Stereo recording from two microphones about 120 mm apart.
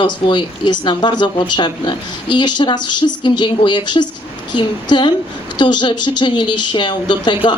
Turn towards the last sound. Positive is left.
turn(degrees=40)  # may be behind; listen again after turning